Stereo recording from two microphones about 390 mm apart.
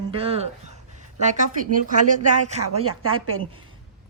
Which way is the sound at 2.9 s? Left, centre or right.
Right.